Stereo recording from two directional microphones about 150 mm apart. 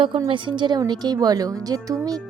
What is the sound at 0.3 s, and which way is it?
A woman's voice, 35° right (ahead or behind).